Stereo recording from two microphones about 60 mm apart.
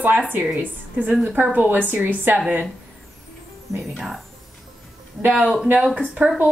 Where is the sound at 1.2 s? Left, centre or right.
Right.